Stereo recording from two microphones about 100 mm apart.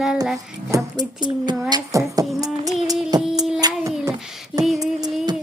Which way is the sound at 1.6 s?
40° right (ahead or behind).